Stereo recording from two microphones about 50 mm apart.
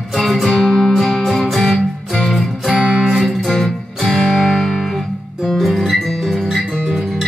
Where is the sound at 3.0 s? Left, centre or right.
Centre.